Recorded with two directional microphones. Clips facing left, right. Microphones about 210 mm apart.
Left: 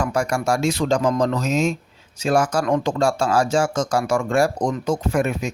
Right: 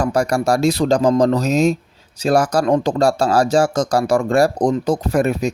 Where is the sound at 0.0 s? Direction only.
35° right (ahead or behind).